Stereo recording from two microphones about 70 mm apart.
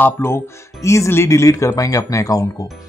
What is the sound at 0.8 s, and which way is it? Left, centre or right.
Speech, left.